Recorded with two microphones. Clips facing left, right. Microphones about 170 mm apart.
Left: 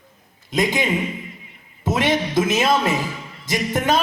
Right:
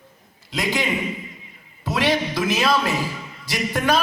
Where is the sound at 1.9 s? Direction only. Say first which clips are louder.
Left 1 dB; 20° left (ahead or behind).